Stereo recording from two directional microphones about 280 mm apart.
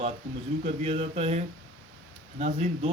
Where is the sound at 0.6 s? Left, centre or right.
Right.